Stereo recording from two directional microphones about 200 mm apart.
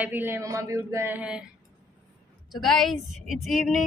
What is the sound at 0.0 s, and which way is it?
Speech, 10° right (ahead or behind).